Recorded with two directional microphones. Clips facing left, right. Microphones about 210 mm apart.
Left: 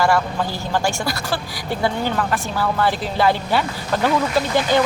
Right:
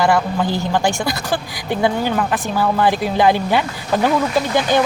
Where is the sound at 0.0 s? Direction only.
15° right (ahead or behind).